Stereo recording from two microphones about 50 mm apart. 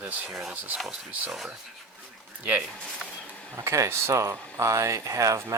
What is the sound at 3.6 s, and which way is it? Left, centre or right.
Speech, right.